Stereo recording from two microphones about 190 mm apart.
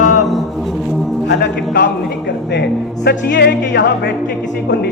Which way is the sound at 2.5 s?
60° left (ahead or behind).